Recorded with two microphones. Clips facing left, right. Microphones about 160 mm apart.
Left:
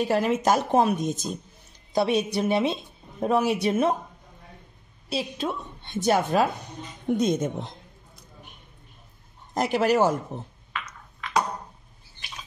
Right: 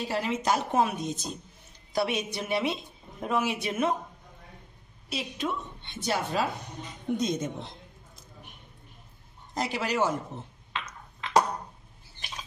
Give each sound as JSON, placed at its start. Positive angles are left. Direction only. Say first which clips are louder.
{"t": 0.1, "sound": "speech", "louder": "left 4 dB", "side_deg": 50}
{"t": 0.7, "sound": "speech", "louder": "left 5 dB", "side_deg": 35}
{"t": 1.9, "sound": "a woman's voice", "louder": "left 5 dB", "side_deg": 20}
{"t": 2.1, "sound": "a woman's voice", "louder": "left 7 dB", "side_deg": 35}
{"t": 3.2, "sound": "a woman's voice", "louder": "left 6 dB", "side_deg": 35}
{"t": 5.1, "sound": "a woman's voice", "louder": "left 3 dB", "side_deg": 30}
{"t": 5.9, "sound": "speech", "louder": "left 8 dB", "side_deg": 45}
{"t": 9.5, "sound": "speech", "louder": "left 8 dB", "side_deg": 50}
{"t": 10.7, "sound": "a sound", "louder": "even", "side_deg": -25}